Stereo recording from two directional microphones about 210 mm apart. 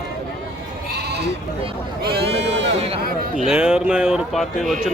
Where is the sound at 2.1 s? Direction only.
50° right (ahead or behind).